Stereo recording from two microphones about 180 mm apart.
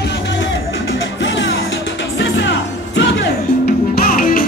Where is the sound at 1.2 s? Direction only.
90° left.